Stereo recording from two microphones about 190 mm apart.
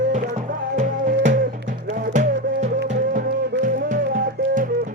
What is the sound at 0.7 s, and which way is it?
Music, 45° right (ahead or behind).